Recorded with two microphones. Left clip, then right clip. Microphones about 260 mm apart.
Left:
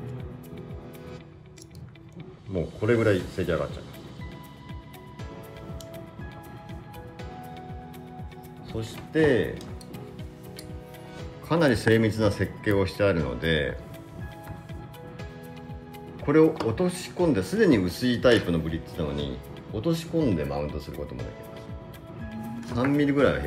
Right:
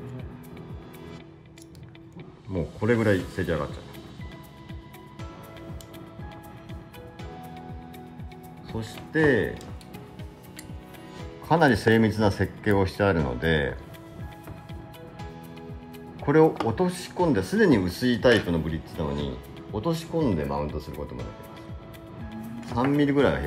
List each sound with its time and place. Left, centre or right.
2.8 s speech: right
8.7 s speech: right
11.4 s speech: right
16.3 s speech: right
22.7 s speech: right